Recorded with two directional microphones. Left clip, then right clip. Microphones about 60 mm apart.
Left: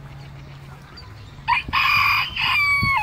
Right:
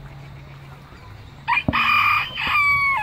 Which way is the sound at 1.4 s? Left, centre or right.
Left.